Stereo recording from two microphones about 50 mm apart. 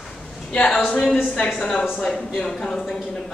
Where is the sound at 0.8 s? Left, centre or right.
Centre.